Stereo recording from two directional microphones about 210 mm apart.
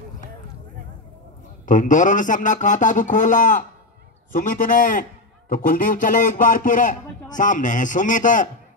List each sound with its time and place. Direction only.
1.7 s a man's voice: 35° left (ahead or behind)